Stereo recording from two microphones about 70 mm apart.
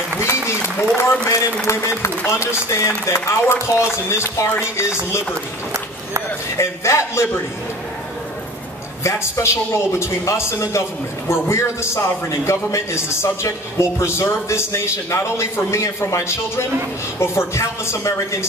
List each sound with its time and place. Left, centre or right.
0.3 s a sound: left
1.2 s a man's voice: left
6.5 s a man's voice: left
9.0 s a man's voice: left